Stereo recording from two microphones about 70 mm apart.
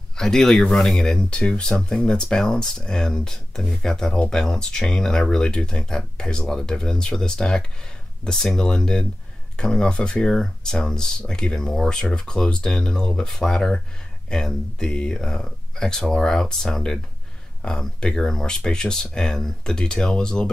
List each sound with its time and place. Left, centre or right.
0.2 s speech: centre